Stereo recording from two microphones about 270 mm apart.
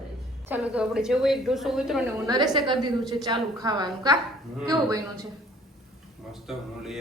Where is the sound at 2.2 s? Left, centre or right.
Centre.